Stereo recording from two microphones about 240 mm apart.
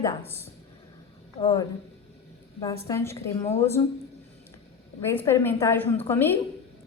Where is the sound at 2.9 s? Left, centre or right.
Centre.